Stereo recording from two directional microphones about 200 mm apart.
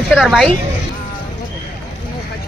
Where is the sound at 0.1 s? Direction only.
Centre (ahead or behind).